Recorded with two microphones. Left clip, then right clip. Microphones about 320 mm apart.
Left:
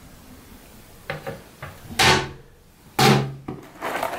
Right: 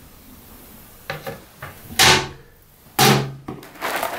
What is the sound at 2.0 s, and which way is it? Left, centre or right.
Cupboard open or close, centre.